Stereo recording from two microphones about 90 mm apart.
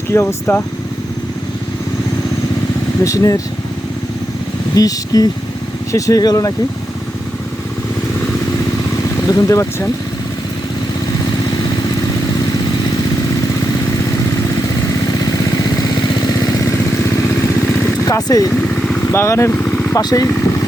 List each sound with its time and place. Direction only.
0.1 s speech: 30° left (ahead or behind)
3.0 s speech: 35° left (ahead or behind)
4.7 s speech: 45° left (ahead or behind)
9.2 s speech: 40° left (ahead or behind)
15.2 s vehicle: 45° left (ahead or behind)
18.0 s speech: 40° left (ahead or behind)
18.7 s vehicle: 10° left (ahead or behind)
19.1 s speech: 30° left (ahead or behind)
19.5 s vehicle: 15° left (ahead or behind)
20.0 s speech: 50° left (ahead or behind)